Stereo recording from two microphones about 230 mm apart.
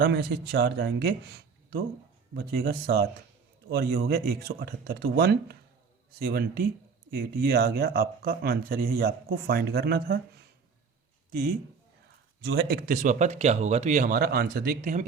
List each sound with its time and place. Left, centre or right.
0.0 s speech: right